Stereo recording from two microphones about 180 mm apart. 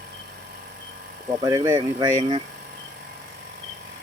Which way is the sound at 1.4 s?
20° right (ahead or behind).